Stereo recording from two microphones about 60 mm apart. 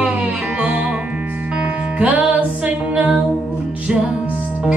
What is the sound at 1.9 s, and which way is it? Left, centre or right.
Music, right.